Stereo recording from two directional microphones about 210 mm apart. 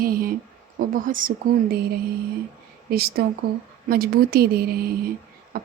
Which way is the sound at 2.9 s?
45° right (ahead or behind).